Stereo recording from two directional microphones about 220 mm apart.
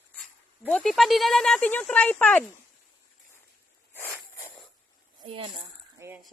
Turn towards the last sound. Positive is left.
turn(degrees=-10)  # may be behind; listen again after turning